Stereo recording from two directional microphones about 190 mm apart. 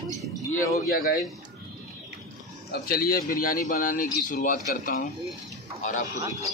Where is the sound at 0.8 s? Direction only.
50° left (ahead or behind).